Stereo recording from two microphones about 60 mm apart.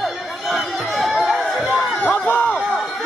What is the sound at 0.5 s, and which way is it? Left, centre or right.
Chatter, centre.